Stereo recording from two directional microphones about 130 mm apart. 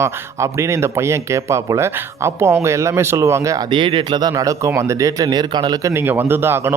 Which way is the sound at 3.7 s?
40° right (ahead or behind).